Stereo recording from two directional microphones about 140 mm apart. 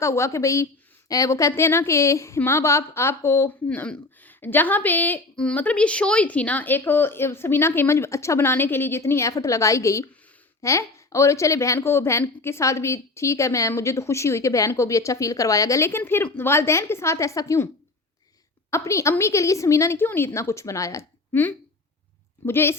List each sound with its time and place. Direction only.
0.0 s a woman's voice: 20° left (ahead or behind)
18.7 s a woman's voice: 20° left (ahead or behind)